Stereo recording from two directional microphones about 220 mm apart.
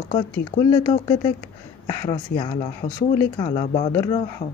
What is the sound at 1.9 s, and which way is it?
A woman's voice, 15° left (ahead or behind).